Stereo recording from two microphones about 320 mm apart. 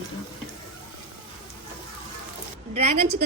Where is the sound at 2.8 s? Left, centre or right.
Centre.